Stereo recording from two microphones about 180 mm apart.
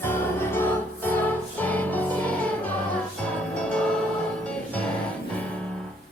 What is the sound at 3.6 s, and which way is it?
Music, 5° left (ahead or behind).